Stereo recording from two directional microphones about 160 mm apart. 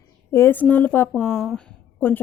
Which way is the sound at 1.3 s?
Centre (ahead or behind).